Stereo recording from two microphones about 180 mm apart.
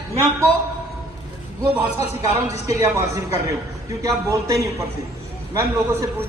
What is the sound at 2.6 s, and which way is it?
A man's voice, 15° right (ahead or behind).